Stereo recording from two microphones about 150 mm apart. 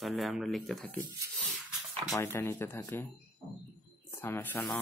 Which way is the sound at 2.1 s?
15° left (ahead or behind).